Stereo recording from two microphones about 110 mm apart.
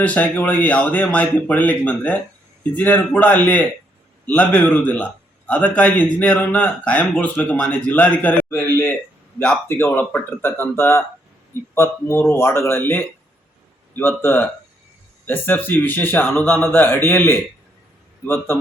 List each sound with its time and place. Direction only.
0.0 s speech: 15° left (ahead or behind)
8.7 s a sound: 20° left (ahead or behind)
9.6 s speech: 20° left (ahead or behind)